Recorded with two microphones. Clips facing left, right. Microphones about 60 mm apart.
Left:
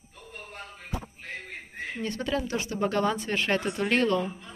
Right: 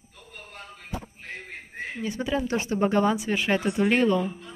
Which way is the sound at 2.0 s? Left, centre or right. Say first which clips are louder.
Right 2 dB; centre.